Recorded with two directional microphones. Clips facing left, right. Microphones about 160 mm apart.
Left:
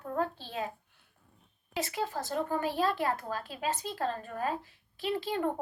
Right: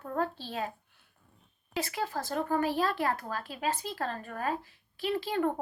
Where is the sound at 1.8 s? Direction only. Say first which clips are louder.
Even; 25° left (ahead or behind).